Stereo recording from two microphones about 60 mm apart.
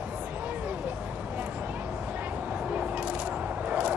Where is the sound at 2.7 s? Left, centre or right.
Right.